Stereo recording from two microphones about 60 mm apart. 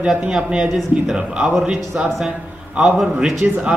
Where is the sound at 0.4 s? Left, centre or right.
Centre.